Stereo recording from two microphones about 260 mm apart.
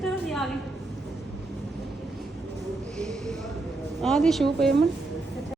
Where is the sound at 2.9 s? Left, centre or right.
Centre.